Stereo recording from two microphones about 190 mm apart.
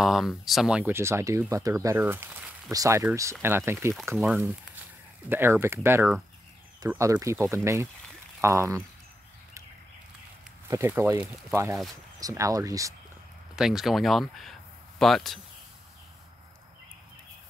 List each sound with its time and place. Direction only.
0.0 s speech: centre (ahead or behind)
5.3 s speech: 10° right (ahead or behind)
10.7 s speech: 15° right (ahead or behind)
13.6 s speech: centre (ahead or behind)